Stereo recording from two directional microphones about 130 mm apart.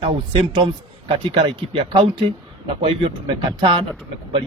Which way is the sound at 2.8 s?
40° right (ahead or behind).